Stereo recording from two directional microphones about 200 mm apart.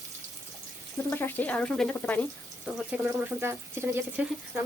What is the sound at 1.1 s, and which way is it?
Speech, 10° left (ahead or behind).